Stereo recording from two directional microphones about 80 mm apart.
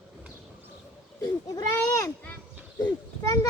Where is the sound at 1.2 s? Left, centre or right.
Left.